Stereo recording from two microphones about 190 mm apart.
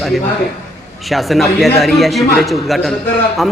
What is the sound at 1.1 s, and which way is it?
A man's voice, centre (ahead or behind).